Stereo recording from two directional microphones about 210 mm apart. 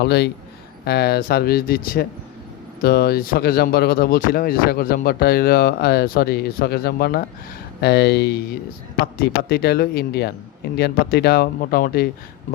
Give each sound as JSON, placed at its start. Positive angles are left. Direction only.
{"t": 0.0, "sound": "speech", "side_deg": 55}